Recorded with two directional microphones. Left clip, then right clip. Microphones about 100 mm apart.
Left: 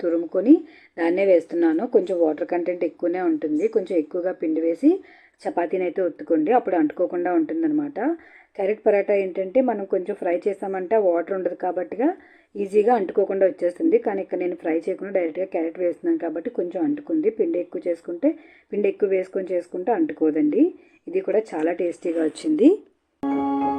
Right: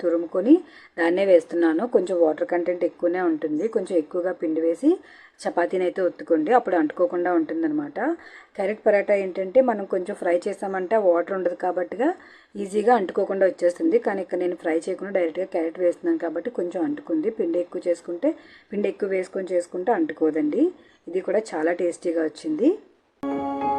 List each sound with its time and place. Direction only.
0.0 s a woman's voice: 20° left (ahead or behind)
22.2 s speech: 35° left (ahead or behind)
23.2 s music: centre (ahead or behind)